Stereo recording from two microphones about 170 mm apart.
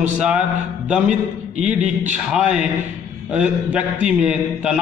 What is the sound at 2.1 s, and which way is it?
A man's voice, 5° right (ahead or behind).